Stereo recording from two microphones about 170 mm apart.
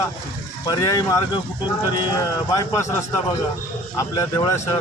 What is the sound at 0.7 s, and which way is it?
Speech, 20° left (ahead or behind).